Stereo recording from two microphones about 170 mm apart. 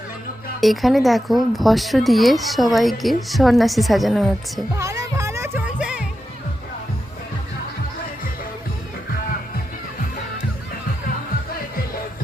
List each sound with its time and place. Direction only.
0.6 s speech: centre (ahead or behind)
4.8 s music: 20° right (ahead or behind)
5.8 s music: 5° right (ahead or behind)